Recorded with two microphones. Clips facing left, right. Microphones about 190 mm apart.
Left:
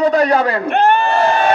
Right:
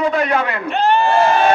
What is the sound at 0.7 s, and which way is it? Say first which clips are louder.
Speech: left 1 dB; 55° left (ahead or behind).